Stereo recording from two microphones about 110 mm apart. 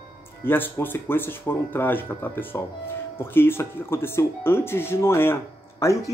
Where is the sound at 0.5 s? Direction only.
20° left (ahead or behind).